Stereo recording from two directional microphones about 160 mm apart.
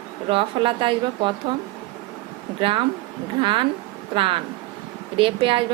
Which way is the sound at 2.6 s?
35° right (ahead or behind).